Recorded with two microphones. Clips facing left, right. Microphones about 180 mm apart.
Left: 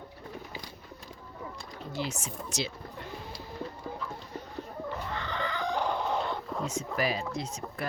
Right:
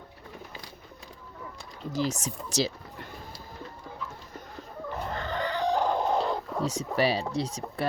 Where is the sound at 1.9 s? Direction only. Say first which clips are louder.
Right 6 dB; 40° right (ahead or behind).